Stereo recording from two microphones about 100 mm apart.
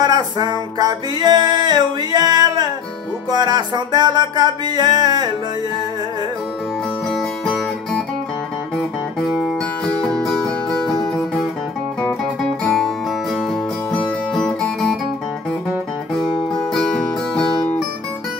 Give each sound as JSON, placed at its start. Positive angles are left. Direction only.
{"t": 0.0, "sound": "music", "side_deg": -45}
{"t": 7.1, "sound": "music", "side_deg": 5}
{"t": 9.2, "sound": "music", "side_deg": 5}
{"t": 12.6, "sound": "music", "side_deg": 0}